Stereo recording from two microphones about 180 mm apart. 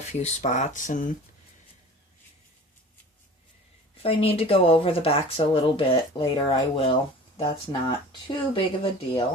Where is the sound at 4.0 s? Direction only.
30° left (ahead or behind).